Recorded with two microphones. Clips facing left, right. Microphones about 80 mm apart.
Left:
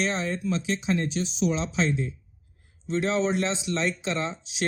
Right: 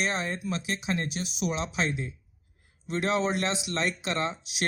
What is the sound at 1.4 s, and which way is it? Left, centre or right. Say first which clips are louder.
Speech: left 3 dB; right.